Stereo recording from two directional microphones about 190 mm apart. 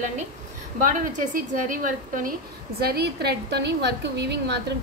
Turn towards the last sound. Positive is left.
turn(degrees=-60)  # may be behind; listen again after turning